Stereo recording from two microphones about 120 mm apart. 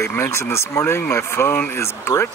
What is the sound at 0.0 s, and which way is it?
Speech, 20° left (ahead or behind).